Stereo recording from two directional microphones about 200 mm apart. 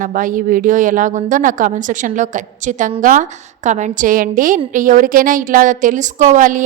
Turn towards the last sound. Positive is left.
turn(degrees=-40)  # may be behind; listen again after turning